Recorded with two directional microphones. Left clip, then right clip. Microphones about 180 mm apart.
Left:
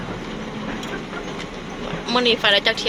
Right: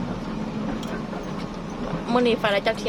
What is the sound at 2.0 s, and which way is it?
Speech, 20° right (ahead or behind).